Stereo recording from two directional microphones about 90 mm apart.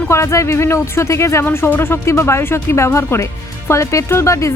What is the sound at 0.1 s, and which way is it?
Speech, 30° left (ahead or behind).